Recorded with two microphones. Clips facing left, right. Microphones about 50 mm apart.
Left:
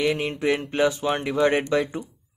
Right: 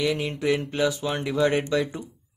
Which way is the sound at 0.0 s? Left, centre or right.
Left.